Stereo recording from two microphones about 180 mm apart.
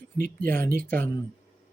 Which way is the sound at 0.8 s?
10° left (ahead or behind).